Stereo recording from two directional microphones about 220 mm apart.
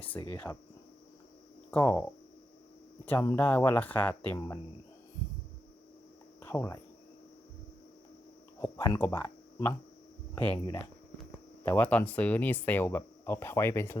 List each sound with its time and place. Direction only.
0.3 s speech: 10° left (ahead or behind)
1.7 s speech: 10° left (ahead or behind)
3.1 s speech: 10° left (ahead or behind)
6.4 s cricket: 10° left (ahead or behind)
8.6 s speech: 10° left (ahead or behind)